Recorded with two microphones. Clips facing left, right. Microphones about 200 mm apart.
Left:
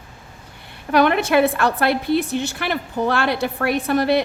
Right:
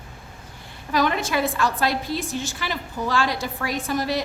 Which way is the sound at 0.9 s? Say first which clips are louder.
Left 6 dB; 65° left (ahead or behind).